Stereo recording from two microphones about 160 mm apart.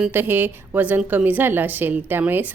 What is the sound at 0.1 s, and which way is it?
A woman's voice, 10° right (ahead or behind).